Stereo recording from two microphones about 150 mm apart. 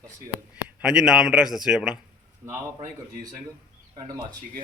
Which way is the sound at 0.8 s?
5° right (ahead or behind).